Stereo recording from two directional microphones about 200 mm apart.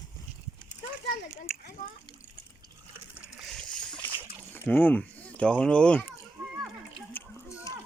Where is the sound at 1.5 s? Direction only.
5° right (ahead or behind).